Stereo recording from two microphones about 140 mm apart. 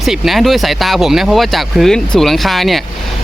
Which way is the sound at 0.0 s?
Centre (ahead or behind).